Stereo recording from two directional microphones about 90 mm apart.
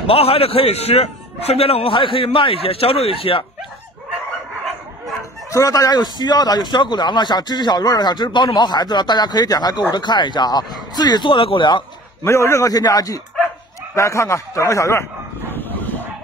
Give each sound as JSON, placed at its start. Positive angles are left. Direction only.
{"t": 0.0, "sound": "a man's voice", "side_deg": 90}
{"t": 5.5, "sound": "a man's voice", "side_deg": 40}
{"t": 12.2, "sound": "a man's voice", "side_deg": 30}
{"t": 15.5, "sound": "a sound", "side_deg": 20}